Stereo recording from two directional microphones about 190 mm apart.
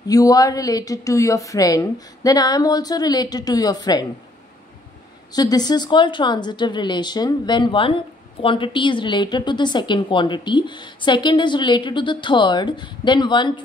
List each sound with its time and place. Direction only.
0.1 s a woman's voice: 20° left (ahead or behind)
5.3 s a woman's voice: 20° left (ahead or behind)